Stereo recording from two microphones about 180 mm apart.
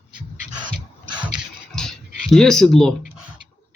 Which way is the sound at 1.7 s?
Centre (ahead or behind).